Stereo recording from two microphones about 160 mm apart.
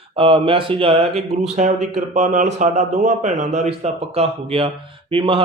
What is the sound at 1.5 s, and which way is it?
A man's voice, 50° right (ahead or behind).